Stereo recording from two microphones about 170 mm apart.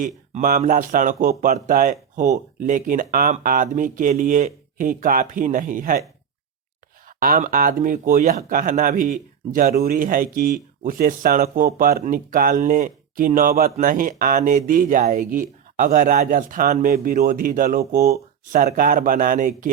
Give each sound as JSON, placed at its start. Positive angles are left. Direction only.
{"t": 0.0, "sound": "speech", "side_deg": -50}
{"t": 7.2, "sound": "speech", "side_deg": -55}